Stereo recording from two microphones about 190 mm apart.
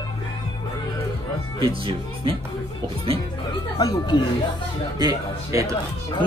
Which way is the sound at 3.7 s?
20° left (ahead or behind).